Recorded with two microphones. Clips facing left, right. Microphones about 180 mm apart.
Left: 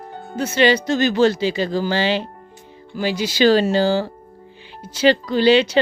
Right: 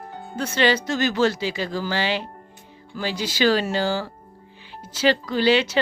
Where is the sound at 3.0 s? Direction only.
15° left (ahead or behind).